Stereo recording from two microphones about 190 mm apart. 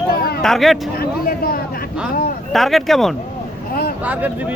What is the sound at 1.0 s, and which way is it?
Speech, 50° left (ahead or behind).